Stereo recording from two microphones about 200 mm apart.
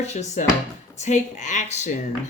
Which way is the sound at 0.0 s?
35° left (ahead or behind).